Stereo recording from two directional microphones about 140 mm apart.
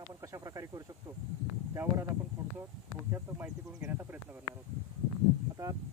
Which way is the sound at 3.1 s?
15° right (ahead or behind).